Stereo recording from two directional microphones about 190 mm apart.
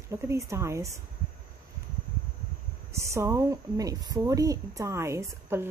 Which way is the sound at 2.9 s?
15° right (ahead or behind).